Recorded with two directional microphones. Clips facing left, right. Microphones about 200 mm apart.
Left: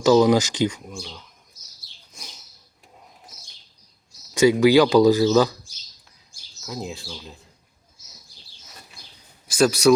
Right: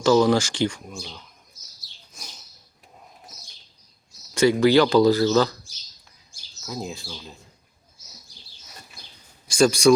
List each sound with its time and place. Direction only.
0.0 s speech: 15° left (ahead or behind)
4.4 s speech: 15° left (ahead or behind)
9.5 s speech: 5° left (ahead or behind)